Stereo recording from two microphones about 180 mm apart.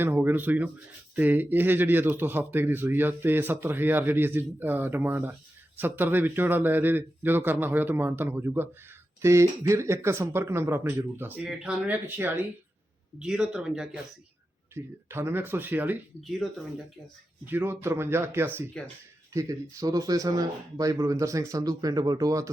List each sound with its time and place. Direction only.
0.0 s speech: 10° right (ahead or behind)
14.8 s speech: 15° right (ahead or behind)
16.2 s speech: centre (ahead or behind)
17.4 s speech: 10° right (ahead or behind)